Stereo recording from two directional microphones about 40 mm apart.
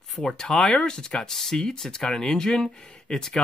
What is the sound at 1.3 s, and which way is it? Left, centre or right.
Speech, centre.